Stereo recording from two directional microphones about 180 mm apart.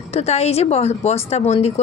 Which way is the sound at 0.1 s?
35° left (ahead or behind).